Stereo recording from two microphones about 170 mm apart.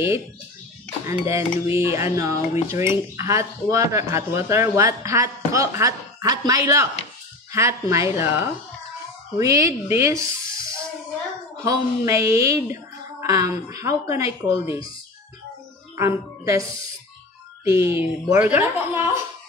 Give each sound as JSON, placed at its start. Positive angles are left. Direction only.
{"t": 1.0, "sound": "speech", "side_deg": -15}
{"t": 16.0, "sound": "speech", "side_deg": -15}
{"t": 17.6, "sound": "speech", "side_deg": -15}